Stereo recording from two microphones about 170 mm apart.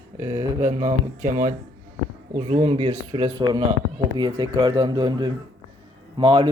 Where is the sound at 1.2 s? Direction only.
45° right (ahead or behind).